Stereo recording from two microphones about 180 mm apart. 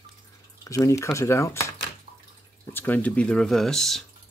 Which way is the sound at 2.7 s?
10° left (ahead or behind).